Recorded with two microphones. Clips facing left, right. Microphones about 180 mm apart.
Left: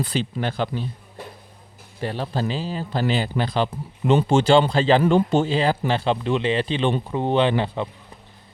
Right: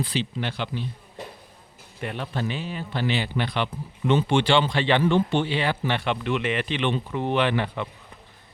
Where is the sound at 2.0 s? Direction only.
35° left (ahead or behind).